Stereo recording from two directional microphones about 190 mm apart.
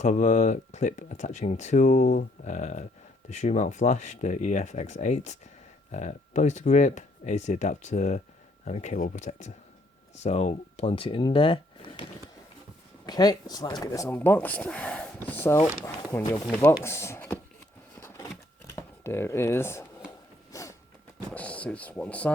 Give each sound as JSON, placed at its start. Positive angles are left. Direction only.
{"t": 0.0, "sound": "speech", "side_deg": 40}
{"t": 13.1, "sound": "speech", "side_deg": 20}
{"t": 18.8, "sound": "speech", "side_deg": 15}
{"t": 20.5, "sound": "a sound", "side_deg": 15}
{"t": 21.3, "sound": "speech", "side_deg": 5}